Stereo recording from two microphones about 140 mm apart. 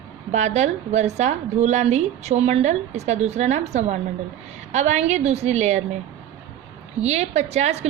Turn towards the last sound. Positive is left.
turn(degrees=-50)  # may be behind; listen again after turning